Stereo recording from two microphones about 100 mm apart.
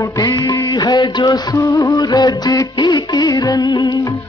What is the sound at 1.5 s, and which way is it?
Music, 30° left (ahead or behind).